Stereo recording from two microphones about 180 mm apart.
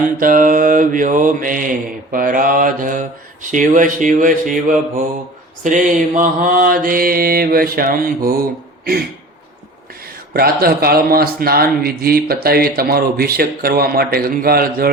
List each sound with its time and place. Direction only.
0.2 s mantra: 50° right (ahead or behind)
10.3 s speech: 55° right (ahead or behind)